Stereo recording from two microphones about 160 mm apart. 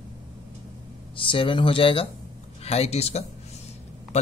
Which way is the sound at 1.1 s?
35° left (ahead or behind).